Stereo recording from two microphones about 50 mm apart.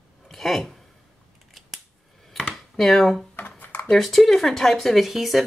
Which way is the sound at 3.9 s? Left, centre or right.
Centre.